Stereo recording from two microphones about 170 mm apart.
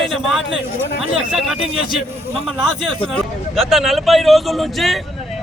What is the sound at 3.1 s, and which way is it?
A man's voice, centre (ahead or behind).